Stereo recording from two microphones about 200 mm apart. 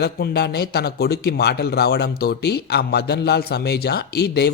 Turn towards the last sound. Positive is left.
turn(degrees=55)  # may be behind; listen again after turning